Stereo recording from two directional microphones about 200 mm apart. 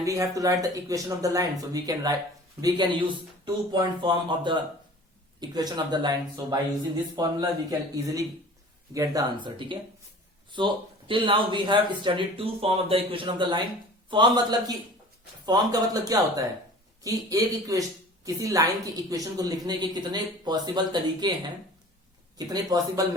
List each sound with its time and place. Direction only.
0.0 s speech: 15° right (ahead or behind)
11.1 s speech: 25° right (ahead or behind)
22.4 s speech: 20° right (ahead or behind)